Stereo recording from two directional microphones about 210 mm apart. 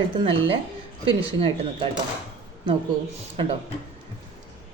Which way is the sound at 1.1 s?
25° right (ahead or behind).